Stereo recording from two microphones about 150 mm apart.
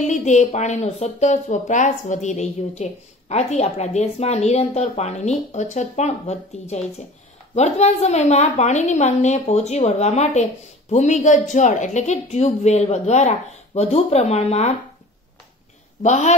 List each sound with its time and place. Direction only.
0.0 s speech: 50° left (ahead or behind)
16.0 s speech: 50° left (ahead or behind)